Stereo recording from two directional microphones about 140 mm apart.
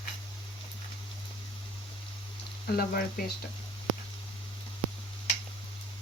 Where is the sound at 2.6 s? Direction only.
90° left.